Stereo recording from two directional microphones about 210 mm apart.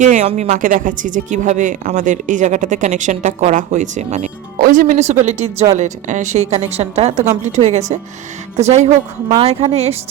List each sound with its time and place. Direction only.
0.0 s a woman's voice: 35° right (ahead or behind)